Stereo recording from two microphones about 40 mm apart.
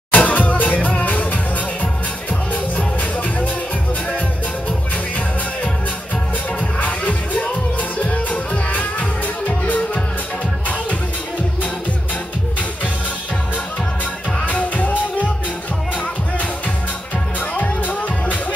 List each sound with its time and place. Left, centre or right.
0.1 s music: left
6.8 s music: left
14.4 s music: left
17.6 s music: left